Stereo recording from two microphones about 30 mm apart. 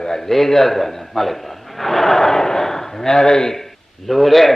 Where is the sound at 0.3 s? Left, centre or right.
Centre.